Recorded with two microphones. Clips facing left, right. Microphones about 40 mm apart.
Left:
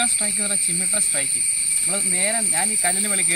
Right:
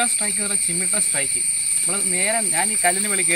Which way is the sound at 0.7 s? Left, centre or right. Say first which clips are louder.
Right 1 dB; centre.